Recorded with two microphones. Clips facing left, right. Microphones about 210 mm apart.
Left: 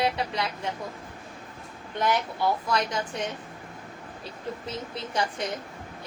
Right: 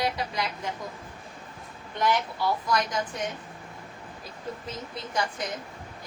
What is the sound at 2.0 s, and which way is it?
Speech, 25° left (ahead or behind).